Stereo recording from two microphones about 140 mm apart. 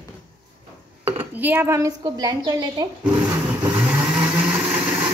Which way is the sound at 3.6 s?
10° right (ahead or behind).